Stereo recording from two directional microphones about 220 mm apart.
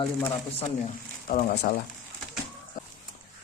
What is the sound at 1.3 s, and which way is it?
Speech, 40° left (ahead or behind).